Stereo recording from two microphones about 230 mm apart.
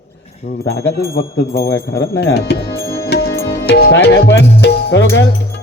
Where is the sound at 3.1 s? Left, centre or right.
Left.